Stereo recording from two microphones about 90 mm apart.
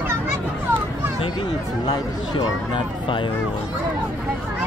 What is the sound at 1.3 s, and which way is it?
Speech, 50° left (ahead or behind).